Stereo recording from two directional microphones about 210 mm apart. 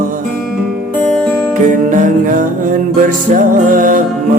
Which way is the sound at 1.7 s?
40° right (ahead or behind).